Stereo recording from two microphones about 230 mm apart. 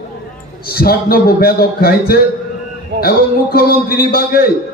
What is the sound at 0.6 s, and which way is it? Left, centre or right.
A man's voice, left.